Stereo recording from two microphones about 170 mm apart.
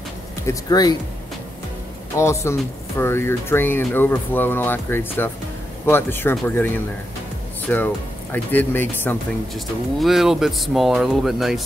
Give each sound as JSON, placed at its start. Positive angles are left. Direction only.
{"t": 0.4, "sound": "speech", "side_deg": 20}
{"t": 2.1, "sound": "speech", "side_deg": 15}
{"t": 9.9, "sound": "speech", "side_deg": 0}